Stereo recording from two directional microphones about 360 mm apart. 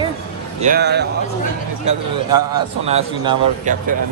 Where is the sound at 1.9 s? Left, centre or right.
Centre.